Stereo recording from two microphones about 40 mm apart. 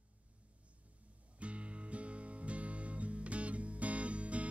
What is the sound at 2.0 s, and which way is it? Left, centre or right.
Music, right.